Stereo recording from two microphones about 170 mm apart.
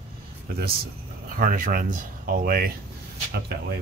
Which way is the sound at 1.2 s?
55° right (ahead or behind).